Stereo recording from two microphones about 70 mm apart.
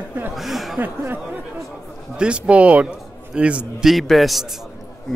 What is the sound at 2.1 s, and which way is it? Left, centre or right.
Speech, centre.